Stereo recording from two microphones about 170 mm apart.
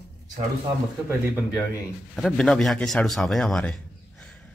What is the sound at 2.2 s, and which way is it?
Speech, centre (ahead or behind).